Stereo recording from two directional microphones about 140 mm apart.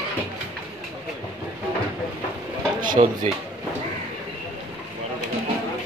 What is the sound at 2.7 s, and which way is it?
Speech, 70° right (ahead or behind).